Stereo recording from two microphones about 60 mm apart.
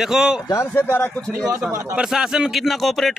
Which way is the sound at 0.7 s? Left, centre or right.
Left.